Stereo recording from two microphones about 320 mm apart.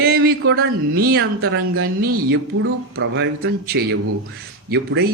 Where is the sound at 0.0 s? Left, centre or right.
Right.